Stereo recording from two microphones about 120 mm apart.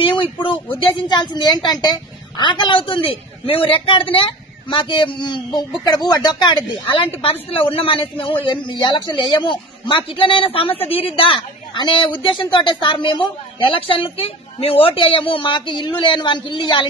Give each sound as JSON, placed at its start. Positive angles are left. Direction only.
{"t": 0.0, "sound": "a man's voice", "side_deg": 45}